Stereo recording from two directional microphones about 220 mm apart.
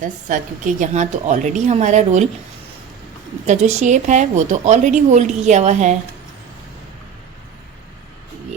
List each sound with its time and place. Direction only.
0.0 s a woman's voice: 35° right (ahead or behind)
3.4 s a woman's voice: 30° right (ahead or behind)